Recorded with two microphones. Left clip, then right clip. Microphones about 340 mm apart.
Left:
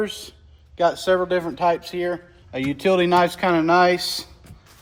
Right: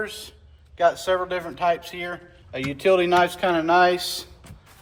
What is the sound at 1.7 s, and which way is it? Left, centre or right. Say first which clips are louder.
Speech: left 2 dB; left.